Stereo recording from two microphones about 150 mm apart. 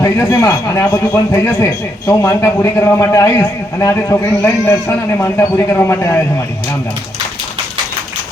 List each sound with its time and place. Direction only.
0.0 s speech: 20° left (ahead or behind)